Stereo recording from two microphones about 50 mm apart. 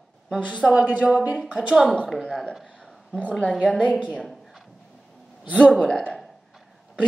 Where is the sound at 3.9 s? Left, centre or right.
Right.